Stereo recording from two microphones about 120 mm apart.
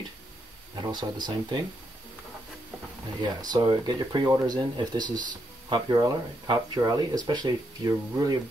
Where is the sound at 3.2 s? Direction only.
35° right (ahead or behind).